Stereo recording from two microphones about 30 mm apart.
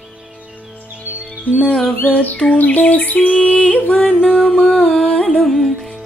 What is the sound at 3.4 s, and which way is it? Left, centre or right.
Yodeling, left.